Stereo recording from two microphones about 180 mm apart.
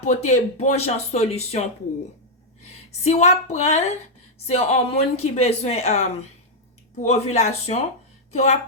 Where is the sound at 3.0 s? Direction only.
40° left (ahead or behind).